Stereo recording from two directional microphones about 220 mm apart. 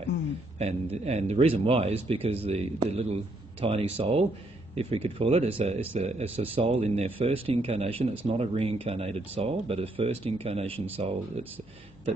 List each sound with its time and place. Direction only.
0.6 s speech: 30° right (ahead or behind)